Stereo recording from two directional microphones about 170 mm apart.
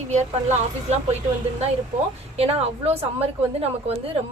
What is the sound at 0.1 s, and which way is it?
Speech, 40° right (ahead or behind).